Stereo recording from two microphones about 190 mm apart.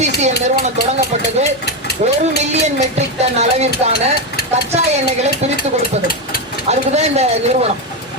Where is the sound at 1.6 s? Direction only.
60° left (ahead or behind).